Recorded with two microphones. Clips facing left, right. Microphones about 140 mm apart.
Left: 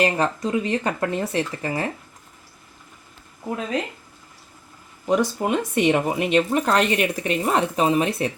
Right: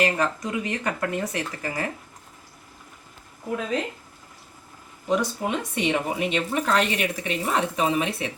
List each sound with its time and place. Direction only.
0.0 s speech: 30° left (ahead or behind)
5.0 s speech: 45° left (ahead or behind)